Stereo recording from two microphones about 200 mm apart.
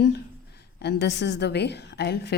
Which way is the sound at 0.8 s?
55° left (ahead or behind).